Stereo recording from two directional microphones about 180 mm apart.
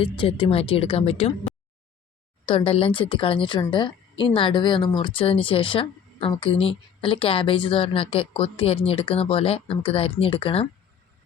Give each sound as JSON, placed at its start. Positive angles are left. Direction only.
{"t": 0.0, "sound": "a woman's voice", "side_deg": 30}